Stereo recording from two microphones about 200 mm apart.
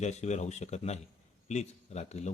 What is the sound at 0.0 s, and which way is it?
A man's voice, 35° left (ahead or behind).